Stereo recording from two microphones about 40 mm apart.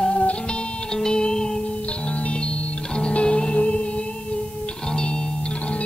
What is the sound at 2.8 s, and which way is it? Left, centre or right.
Music, left.